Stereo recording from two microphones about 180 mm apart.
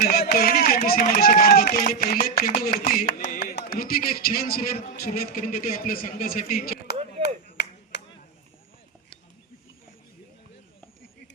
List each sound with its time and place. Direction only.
0.1 s run: 60° left (ahead or behind)
2.5 s chopping: 50° left (ahead or behind)
7.5 s clapping: 65° left (ahead or behind)